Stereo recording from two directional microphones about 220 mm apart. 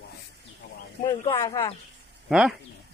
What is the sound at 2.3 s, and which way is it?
Speech, 5° right (ahead or behind).